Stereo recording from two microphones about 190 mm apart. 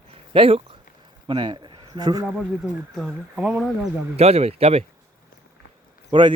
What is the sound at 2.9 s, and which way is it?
Speech, 5° right (ahead or behind).